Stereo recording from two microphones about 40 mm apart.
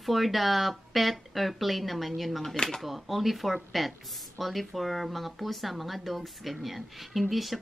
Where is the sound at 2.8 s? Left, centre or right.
Centre.